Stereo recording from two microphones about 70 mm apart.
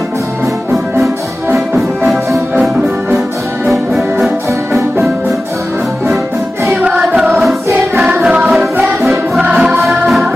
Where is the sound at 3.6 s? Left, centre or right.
Centre.